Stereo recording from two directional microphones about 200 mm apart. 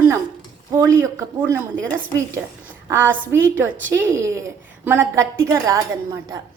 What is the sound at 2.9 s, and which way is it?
A woman's voice, 10° right (ahead or behind).